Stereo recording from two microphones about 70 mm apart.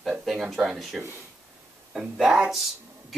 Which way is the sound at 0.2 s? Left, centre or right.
Centre.